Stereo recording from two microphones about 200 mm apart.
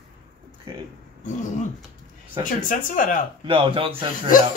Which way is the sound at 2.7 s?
40° left (ahead or behind).